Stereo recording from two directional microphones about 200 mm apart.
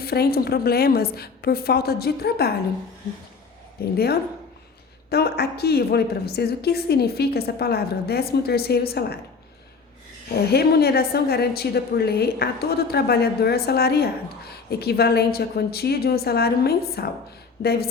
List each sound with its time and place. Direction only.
0.0 s a woman's voice: 50° left (ahead or behind)
3.9 s a woman's voice: 50° left (ahead or behind)
10.5 s a woman's voice: 55° left (ahead or behind)